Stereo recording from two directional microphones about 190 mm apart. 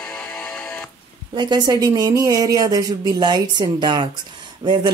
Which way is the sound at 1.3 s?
25° right (ahead or behind).